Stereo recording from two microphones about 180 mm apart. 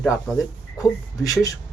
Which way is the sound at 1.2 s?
20° left (ahead or behind).